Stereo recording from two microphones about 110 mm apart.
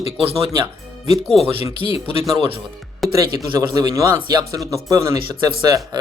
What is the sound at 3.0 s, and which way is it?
Music, centre (ahead or behind).